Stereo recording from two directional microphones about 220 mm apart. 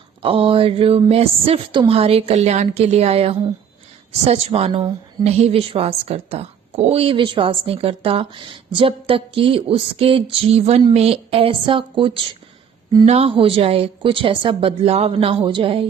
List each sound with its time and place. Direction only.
0.2 s a woman's voice: 25° right (ahead or behind)